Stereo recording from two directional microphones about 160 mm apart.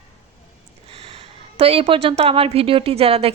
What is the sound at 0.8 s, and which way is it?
A woman's voice, 35° right (ahead or behind).